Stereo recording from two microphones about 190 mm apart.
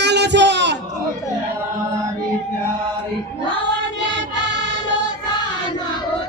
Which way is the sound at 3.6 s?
70° right (ahead or behind).